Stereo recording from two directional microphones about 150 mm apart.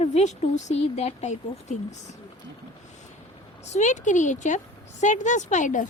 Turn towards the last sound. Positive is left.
turn(degrees=55)  # may be behind; listen again after turning